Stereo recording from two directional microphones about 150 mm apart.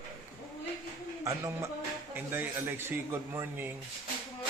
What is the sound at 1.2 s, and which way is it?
A man's voice, 20° right (ahead or behind).